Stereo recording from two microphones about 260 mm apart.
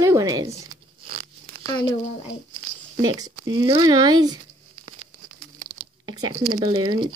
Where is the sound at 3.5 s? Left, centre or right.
Centre.